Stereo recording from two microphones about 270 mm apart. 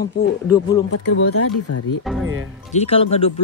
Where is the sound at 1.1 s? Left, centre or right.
Left.